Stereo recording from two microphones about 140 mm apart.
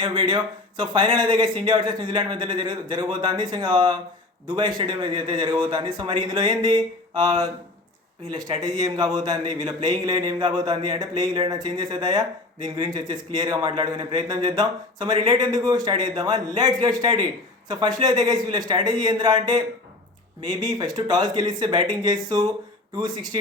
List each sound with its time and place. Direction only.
0.0 s a man's voice: 35° right (ahead or behind)